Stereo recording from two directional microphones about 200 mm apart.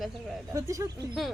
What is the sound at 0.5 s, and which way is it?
Speech, 15° right (ahead or behind).